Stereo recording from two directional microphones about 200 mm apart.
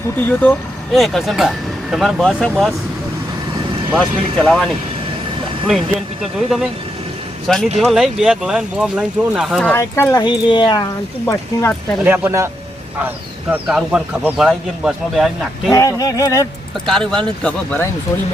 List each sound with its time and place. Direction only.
0.2 s speech: 10° left (ahead or behind)
3.9 s speech: centre (ahead or behind)
7.4 s speech: centre (ahead or behind)
9.7 s speech: 15° left (ahead or behind)
11.3 s speech: 10° left (ahead or behind)
12.0 s speech: 10° right (ahead or behind)
13.5 s speech: 5° right (ahead or behind)
15.7 s speech: 15° left (ahead or behind)
16.8 s speech: centre (ahead or behind)